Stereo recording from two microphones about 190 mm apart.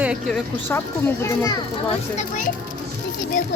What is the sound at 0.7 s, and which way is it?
Speech, 15° left (ahead or behind).